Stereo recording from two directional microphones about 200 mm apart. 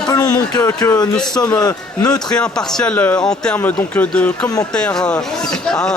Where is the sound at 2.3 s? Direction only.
5° left (ahead or behind).